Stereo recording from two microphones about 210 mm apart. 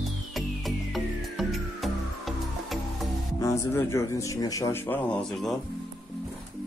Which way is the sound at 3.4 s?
15° left (ahead or behind).